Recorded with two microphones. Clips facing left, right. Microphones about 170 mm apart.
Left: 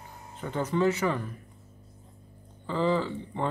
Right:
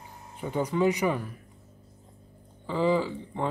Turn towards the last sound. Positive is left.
turn(degrees=-5)  # may be behind; listen again after turning